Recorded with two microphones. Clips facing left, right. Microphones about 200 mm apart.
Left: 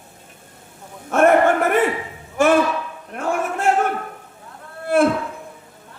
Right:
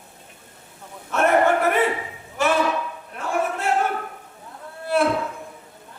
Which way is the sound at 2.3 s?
50° left (ahead or behind).